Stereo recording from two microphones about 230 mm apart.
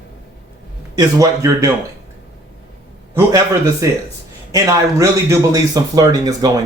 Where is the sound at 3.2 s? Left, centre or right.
Centre.